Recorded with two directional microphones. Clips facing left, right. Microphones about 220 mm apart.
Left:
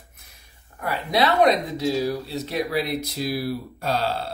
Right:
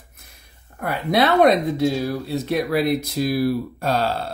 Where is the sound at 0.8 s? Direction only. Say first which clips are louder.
Right 3 dB; 55° right (ahead or behind).